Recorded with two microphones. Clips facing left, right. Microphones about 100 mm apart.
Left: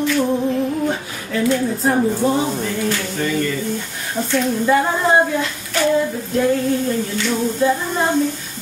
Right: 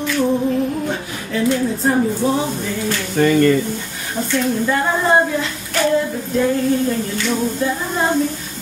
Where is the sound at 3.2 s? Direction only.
60° right (ahead or behind).